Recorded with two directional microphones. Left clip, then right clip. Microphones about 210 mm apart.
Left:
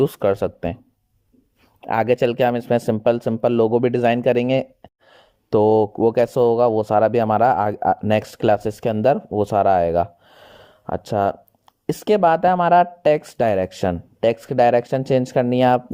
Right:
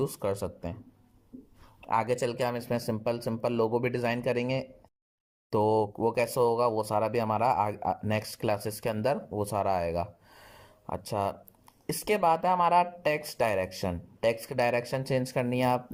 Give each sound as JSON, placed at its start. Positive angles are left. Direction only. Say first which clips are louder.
{"t": 0.0, "sound": "speech", "louder": "left 13 dB", "side_deg": 35}
{"t": 1.9, "sound": "speech", "louder": "left 9 dB", "side_deg": 50}
{"t": 2.1, "sound": "speech", "louder": "left 12 dB", "side_deg": 35}